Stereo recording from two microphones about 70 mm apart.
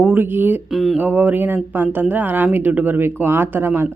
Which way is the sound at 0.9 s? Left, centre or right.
Right.